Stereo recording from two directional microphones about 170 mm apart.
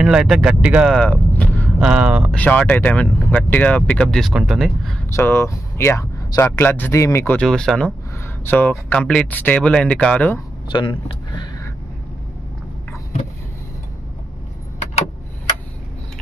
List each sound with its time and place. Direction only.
0.0 s speech: 5° right (ahead or behind)
0.9 s vehicle: 5° left (ahead or behind)
1.8 s speech: 5° right (ahead or behind)
2.3 s speech: 10° left (ahead or behind)
5.1 s speech: 15° left (ahead or behind)
10.7 s speech: 30° left (ahead or behind)